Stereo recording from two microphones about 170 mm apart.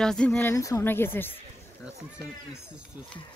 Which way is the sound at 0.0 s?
5° left (ahead or behind).